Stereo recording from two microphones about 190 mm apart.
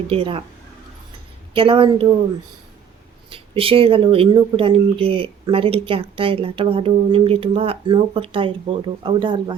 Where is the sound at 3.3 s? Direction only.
30° right (ahead or behind).